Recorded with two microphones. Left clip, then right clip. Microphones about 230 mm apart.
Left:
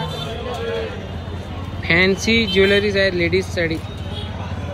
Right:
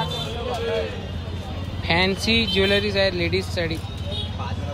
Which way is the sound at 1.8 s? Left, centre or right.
Centre.